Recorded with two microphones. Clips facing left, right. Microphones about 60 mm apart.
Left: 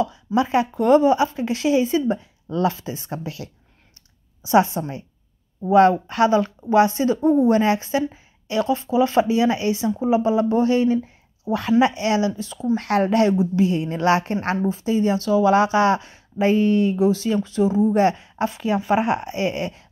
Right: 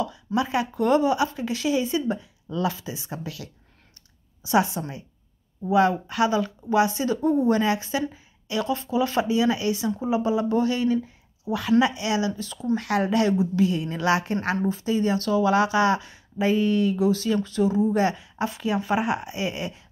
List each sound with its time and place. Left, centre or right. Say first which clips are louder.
0.0 s a woman's voice: left 5 dB; left
4.5 s a woman's voice: left 5 dB; left
12.7 s a woman's voice: left 4 dB; left
13.3 s speech: left 3 dB; left
14.7 s speech: left 4 dB; left
17.8 s a woman's voice: left 5 dB; left